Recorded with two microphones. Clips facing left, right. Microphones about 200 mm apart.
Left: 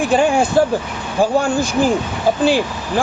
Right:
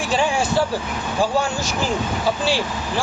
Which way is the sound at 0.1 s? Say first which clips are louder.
Left 5 dB; 55° left (ahead or behind).